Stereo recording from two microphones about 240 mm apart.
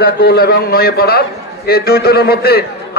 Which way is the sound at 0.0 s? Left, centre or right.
Left.